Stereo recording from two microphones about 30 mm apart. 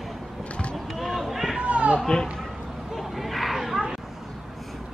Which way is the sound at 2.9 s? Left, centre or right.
Centre.